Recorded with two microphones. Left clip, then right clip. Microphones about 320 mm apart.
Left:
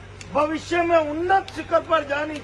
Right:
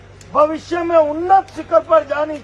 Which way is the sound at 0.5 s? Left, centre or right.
Centre.